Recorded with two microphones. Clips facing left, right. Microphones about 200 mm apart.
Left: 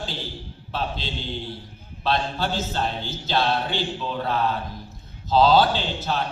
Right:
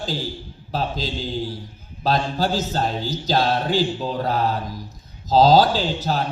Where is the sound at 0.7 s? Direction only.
40° right (ahead or behind).